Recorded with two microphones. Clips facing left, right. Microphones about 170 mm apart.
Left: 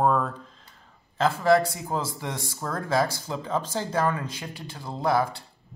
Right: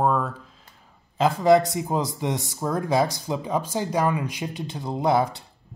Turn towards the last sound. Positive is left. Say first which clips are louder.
# right 3 dB
turn(degrees=-20)  # may be behind; listen again after turning